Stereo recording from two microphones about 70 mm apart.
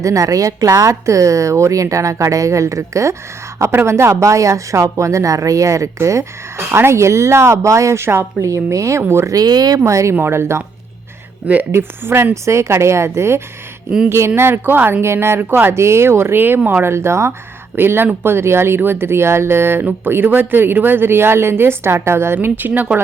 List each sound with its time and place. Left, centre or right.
0.0 s a woman's voice: right
6.6 s a woman's voice: right
8.4 s a woman's voice: right
9.3 s speech: right
9.8 s a woman's voice: right
11.7 s speech: right